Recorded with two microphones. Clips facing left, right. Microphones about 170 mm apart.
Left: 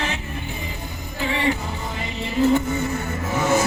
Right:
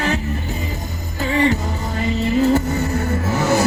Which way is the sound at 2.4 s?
40° right (ahead or behind).